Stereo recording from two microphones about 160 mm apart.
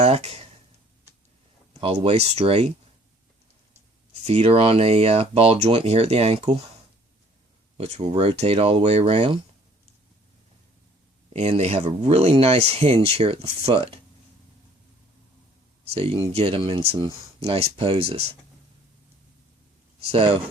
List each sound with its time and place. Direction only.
0.0 s speech: 40° right (ahead or behind)
1.8 s speech: 40° right (ahead or behind)
4.1 s speech: 40° right (ahead or behind)
7.8 s speech: 40° right (ahead or behind)
11.3 s speech: 40° right (ahead or behind)
15.9 s speech: 40° right (ahead or behind)
20.0 s speech: 35° right (ahead or behind)